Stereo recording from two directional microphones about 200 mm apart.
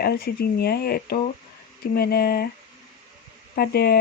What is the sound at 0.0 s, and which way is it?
Speech, 50° left (ahead or behind).